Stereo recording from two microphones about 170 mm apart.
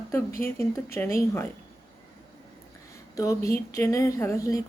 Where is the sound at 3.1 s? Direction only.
20° left (ahead or behind).